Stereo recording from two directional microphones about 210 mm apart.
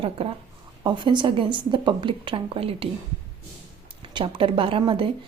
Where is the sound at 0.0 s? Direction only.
25° right (ahead or behind).